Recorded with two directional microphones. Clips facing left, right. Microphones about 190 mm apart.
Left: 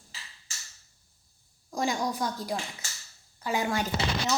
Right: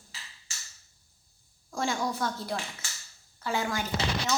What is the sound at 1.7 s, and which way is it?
Speech, 15° left (ahead or behind).